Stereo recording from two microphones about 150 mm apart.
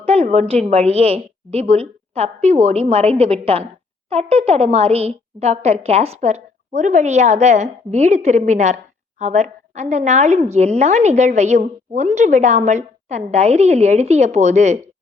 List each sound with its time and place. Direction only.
0.0 s a woman's voice: 45° right (ahead or behind)